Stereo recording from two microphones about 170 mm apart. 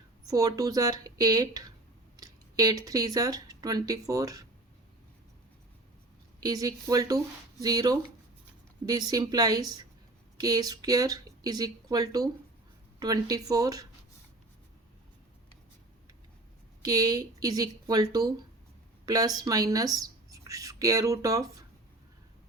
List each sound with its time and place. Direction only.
0.3 s speech: 20° right (ahead or behind)
6.4 s speech: 20° right (ahead or behind)
16.8 s a woman's voice: 20° right (ahead or behind)